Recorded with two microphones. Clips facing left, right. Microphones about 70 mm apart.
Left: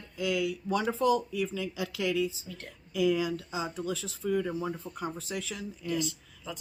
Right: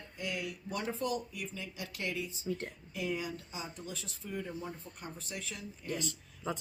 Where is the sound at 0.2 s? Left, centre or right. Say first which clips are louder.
Left 9 dB; left.